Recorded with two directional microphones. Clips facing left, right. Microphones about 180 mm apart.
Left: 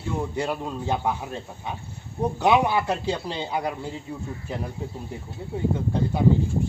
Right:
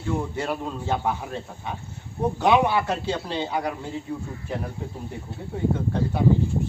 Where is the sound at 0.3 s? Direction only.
10° left (ahead or behind).